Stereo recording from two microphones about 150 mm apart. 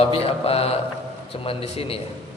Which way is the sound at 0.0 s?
40° left (ahead or behind).